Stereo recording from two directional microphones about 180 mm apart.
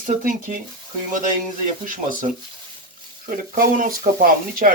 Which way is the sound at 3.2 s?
50° right (ahead or behind).